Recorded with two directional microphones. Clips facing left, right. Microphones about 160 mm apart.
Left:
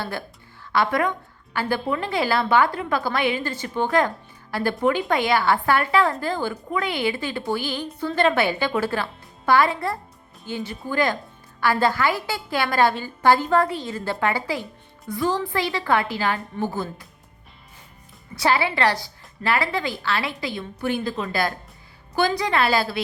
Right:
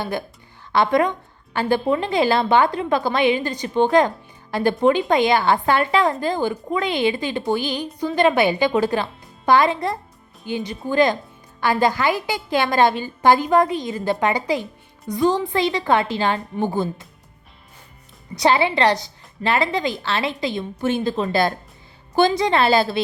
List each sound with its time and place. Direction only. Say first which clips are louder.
0.0 s a woman's voice: right 4 dB; 15° right (ahead or behind)
18.3 s a woman's voice: right 4 dB; 20° right (ahead or behind)